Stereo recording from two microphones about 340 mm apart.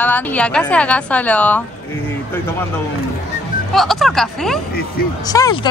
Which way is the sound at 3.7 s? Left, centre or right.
Centre.